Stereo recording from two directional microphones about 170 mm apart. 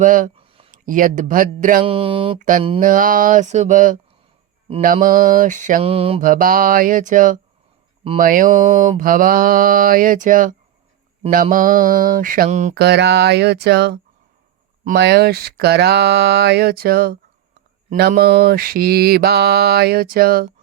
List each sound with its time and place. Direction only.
0.0 s mantra: 50° right (ahead or behind)
0.3 s a sound: 30° right (ahead or behind)
0.9 s mantra: 50° right (ahead or behind)
1.8 s speech: 30° right (ahead or behind)
2.4 s mantra: 50° right (ahead or behind)
5.8 s speech: 35° right (ahead or behind)
6.2 s mantra: 55° right (ahead or behind)
11.5 s mantra: 55° right (ahead or behind)
12.7 s speech: 75° right (ahead or behind)
18.2 s mantra: 65° right (ahead or behind)